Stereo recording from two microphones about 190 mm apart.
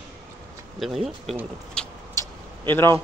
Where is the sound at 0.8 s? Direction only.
Centre (ahead or behind).